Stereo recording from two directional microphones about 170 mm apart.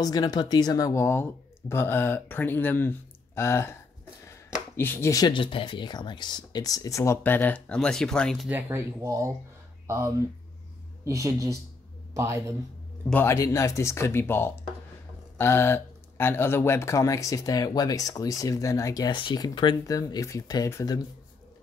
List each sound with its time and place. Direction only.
0.0 s speech: 20° left (ahead or behind)
4.7 s speech: 15° left (ahead or behind)
8.5 s speech: 10° right (ahead or behind)
13.1 s speech: 15° left (ahead or behind)